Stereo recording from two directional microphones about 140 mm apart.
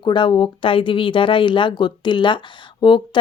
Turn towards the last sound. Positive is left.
turn(degrees=35)  # may be behind; listen again after turning